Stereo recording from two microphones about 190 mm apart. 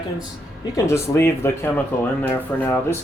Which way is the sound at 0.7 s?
15° left (ahead or behind).